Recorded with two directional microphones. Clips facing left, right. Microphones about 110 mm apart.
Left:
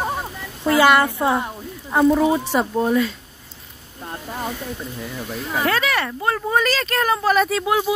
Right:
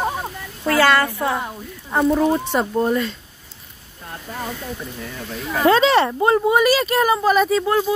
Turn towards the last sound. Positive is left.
turn(degrees=0)  # may be behind; listen again after turning